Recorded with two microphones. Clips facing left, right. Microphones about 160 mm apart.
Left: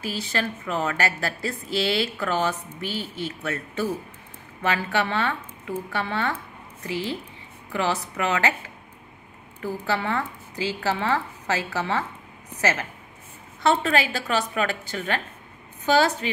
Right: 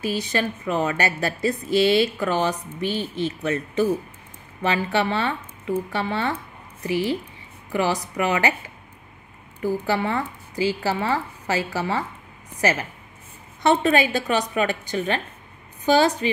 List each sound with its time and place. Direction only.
0.0 s a woman's voice: 15° right (ahead or behind)